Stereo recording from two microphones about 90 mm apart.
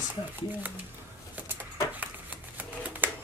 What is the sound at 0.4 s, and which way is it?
Speech, 20° right (ahead or behind).